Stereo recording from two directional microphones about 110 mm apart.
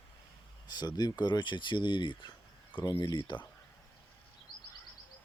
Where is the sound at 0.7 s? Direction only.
40° left (ahead or behind).